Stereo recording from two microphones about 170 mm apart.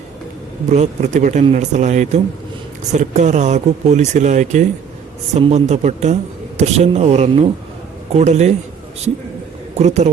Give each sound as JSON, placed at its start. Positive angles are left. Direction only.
{"t": 0.7, "sound": "a man's voice", "side_deg": -45}
{"t": 9.7, "sound": "a man's voice", "side_deg": -40}